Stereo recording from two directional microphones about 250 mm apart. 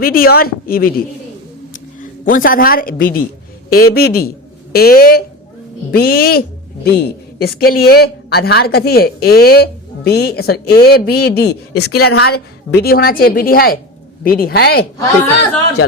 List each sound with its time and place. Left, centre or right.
0.0 s speech: left